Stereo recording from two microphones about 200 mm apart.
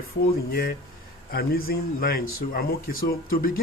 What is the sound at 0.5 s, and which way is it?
Speech, 50° left (ahead or behind).